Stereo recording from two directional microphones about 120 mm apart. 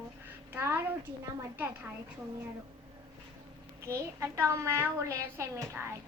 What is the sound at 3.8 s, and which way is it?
A woman's voice, 20° right (ahead or behind).